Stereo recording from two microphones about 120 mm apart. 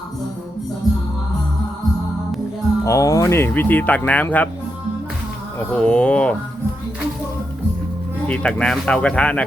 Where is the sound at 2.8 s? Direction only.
25° left (ahead or behind).